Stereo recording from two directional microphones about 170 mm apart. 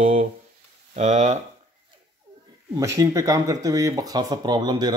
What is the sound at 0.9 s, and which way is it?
Speech, 45° right (ahead or behind).